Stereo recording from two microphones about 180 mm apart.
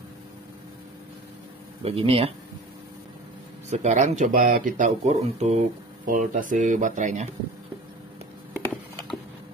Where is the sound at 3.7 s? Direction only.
40° right (ahead or behind).